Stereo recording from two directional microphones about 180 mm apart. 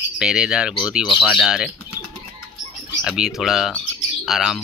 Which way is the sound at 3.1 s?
5° right (ahead or behind).